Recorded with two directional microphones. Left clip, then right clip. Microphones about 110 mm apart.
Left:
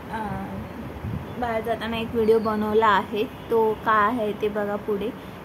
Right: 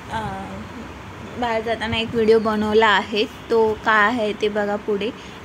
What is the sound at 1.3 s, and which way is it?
Speech, 55° right (ahead or behind).